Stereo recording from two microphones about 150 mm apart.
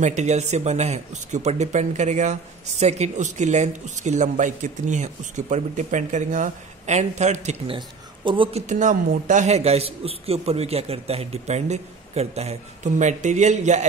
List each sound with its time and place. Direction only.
0.0 s speech: 50° right (ahead or behind)
7.7 s speech: 35° right (ahead or behind); by 13.8 s 50° right (ahead or behind)